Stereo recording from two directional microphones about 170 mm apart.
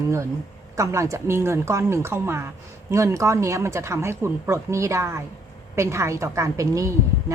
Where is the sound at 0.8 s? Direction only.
20° right (ahead or behind).